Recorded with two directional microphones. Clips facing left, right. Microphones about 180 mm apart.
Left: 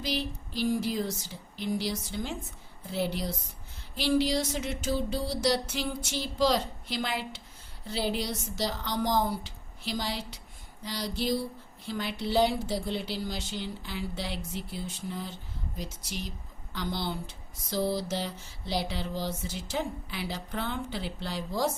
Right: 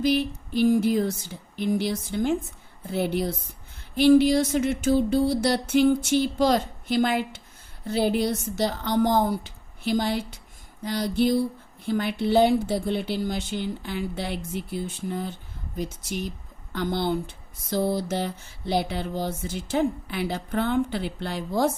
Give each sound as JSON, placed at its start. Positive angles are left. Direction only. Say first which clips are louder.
{"t": 0.0, "sound": "speech", "louder": "right 10 dB", "side_deg": -55}